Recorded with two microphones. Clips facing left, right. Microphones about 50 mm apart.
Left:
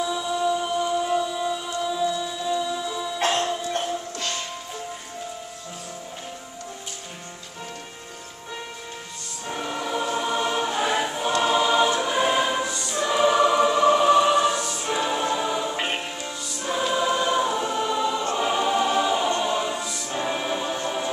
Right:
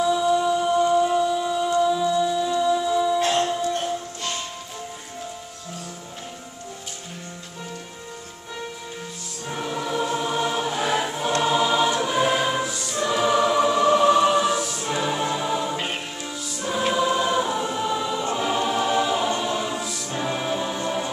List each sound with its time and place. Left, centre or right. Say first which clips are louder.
0.0 s music: right 5 dB; centre
9.5 s choir: right 1 dB; centre
15.7 s music: left 1 dB; centre
16.3 s music: right 3 dB; centre
16.9 s choir: right 1 dB; centre
18.4 s music: left 2 dB; centre